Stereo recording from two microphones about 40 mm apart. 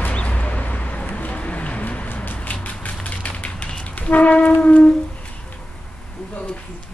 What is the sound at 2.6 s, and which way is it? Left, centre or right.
Music, left.